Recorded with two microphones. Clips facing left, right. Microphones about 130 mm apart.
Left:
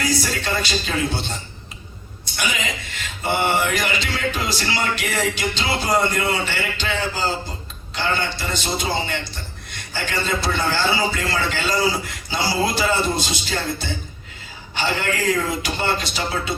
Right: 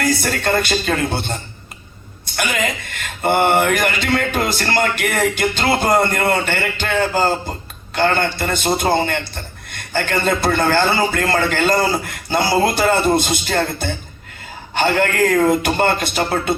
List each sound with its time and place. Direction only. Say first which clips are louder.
0.0 s a man's voice: right 4 dB; 55° right (ahead or behind)